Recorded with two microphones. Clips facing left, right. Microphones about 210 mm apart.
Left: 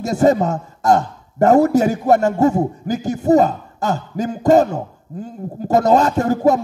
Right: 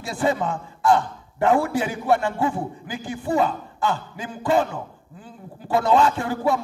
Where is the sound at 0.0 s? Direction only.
45° left (ahead or behind).